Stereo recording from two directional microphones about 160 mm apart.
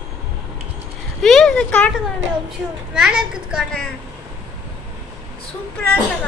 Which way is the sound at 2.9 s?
5° right (ahead or behind).